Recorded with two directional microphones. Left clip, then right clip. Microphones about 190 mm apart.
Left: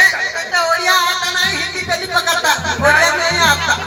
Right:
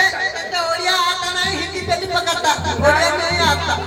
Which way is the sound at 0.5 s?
35° left (ahead or behind).